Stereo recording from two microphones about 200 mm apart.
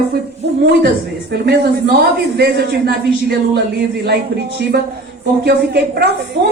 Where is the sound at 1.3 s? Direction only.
55° right (ahead or behind).